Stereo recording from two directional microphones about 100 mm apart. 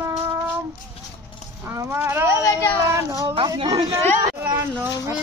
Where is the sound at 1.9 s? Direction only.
20° right (ahead or behind).